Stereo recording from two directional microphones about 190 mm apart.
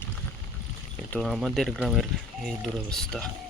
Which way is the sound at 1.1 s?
Centre (ahead or behind).